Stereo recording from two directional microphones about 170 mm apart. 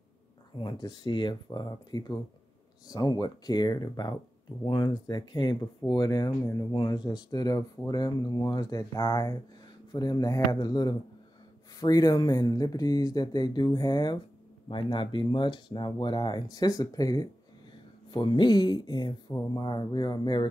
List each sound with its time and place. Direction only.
0.6 s speech: 25° left (ahead or behind)